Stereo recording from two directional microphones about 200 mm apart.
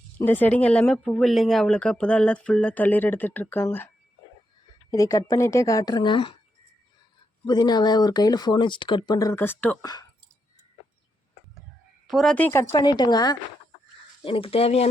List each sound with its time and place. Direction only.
0.2 s speech: 10° left (ahead or behind)
4.9 s a woman's voice: 15° left (ahead or behind)
7.4 s speech: 20° left (ahead or behind)
12.0 s a woman's voice: centre (ahead or behind)
12.7 s speech: 20° left (ahead or behind)